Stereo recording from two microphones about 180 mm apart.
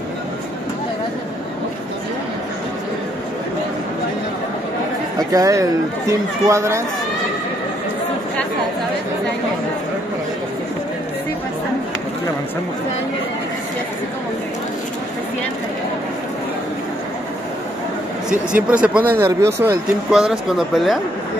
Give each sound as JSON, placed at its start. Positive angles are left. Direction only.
{"t": 5.3, "sound": "speech", "side_deg": -20}
{"t": 18.5, "sound": "speech", "side_deg": -5}
{"t": 20.1, "sound": "speech", "side_deg": 0}